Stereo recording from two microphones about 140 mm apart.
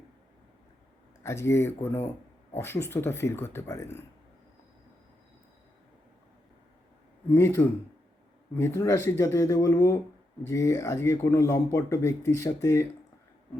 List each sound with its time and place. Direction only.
1.2 s speech: 20° left (ahead or behind)
7.3 s speech: 15° left (ahead or behind)